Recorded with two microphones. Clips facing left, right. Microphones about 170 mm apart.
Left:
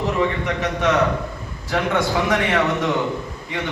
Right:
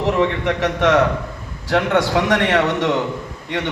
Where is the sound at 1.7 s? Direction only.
70° right (ahead or behind).